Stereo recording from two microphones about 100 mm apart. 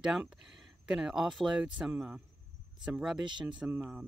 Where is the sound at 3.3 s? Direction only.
50° right (ahead or behind).